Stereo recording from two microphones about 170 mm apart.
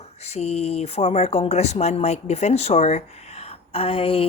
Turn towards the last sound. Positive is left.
turn(degrees=35)  # may be behind; listen again after turning